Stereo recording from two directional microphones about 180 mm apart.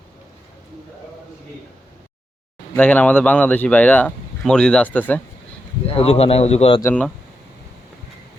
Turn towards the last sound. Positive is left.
turn(degrees=5)  # may be behind; listen again after turning